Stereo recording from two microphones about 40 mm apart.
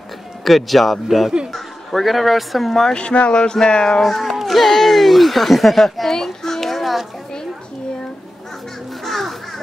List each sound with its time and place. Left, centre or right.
0.5 s speech: centre
2.9 s speech: left
4.0 s speech: centre
9.0 s crow: centre